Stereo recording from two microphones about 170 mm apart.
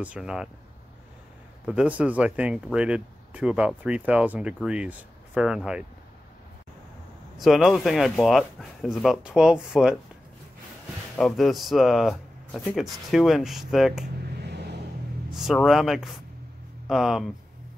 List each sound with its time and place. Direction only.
0.0 s speech: 5° right (ahead or behind)
1.7 s speech: 5° right (ahead or behind)
7.3 s speech: centre (ahead or behind)
11.1 s speech: centre (ahead or behind)
14.4 s vehicle: 80° right
15.3 s speech: centre (ahead or behind)